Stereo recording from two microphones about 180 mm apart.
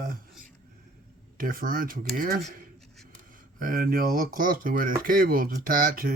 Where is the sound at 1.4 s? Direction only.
50° right (ahead or behind).